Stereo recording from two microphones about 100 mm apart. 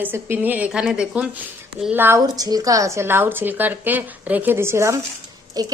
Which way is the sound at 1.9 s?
20° right (ahead or behind).